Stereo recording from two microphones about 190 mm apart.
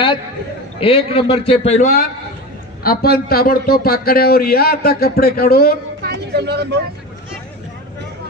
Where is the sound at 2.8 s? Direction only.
55° left (ahead or behind).